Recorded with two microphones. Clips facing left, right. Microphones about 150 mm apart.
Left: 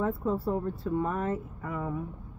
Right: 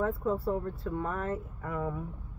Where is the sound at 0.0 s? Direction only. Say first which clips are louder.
Left 1 dB; 20° left (ahead or behind).